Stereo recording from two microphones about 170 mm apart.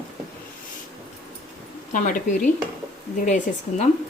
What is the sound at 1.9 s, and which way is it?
Speech, 50° left (ahead or behind).